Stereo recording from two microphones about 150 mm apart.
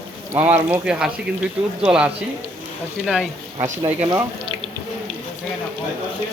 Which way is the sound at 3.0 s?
5° right (ahead or behind).